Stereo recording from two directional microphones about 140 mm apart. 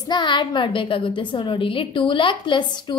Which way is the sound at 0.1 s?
35° left (ahead or behind).